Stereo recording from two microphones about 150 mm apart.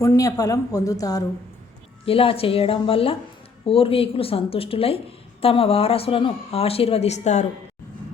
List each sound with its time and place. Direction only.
0.0 s speech: 20° left (ahead or behind)
2.0 s a woman's voice: 40° left (ahead or behind)